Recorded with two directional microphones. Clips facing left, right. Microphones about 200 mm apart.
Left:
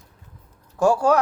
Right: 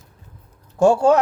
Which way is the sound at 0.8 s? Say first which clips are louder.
Right 4 dB; 25° right (ahead or behind).